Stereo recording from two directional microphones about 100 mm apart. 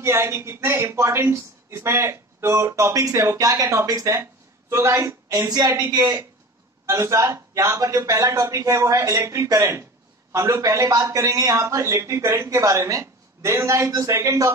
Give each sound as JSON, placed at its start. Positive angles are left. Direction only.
{"t": 0.0, "sound": "speech", "side_deg": -25}
{"t": 6.9, "sound": "a man's voice", "side_deg": -30}